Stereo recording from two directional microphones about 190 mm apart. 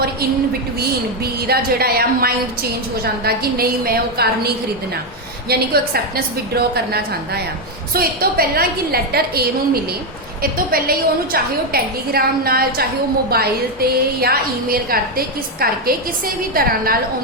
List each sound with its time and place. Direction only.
0.8 s a woman's voice: 55° right (ahead or behind)